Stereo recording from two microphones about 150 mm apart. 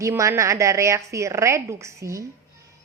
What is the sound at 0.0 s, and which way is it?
A woman's voice, 20° right (ahead or behind).